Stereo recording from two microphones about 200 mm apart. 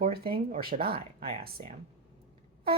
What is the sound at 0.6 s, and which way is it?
Speech, 50° right (ahead or behind).